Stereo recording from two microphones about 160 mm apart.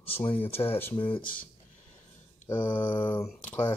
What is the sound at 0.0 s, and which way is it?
Speech, 35° left (ahead or behind).